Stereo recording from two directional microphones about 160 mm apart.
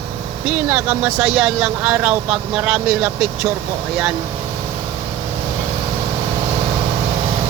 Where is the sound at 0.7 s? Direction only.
10° right (ahead or behind).